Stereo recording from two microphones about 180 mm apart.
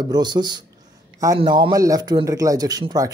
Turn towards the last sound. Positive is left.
turn(degrees=-20)  # may be behind; listen again after turning